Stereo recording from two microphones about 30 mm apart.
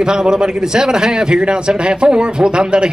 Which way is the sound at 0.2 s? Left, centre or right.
Right.